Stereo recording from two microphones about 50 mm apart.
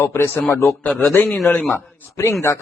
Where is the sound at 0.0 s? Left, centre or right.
Left.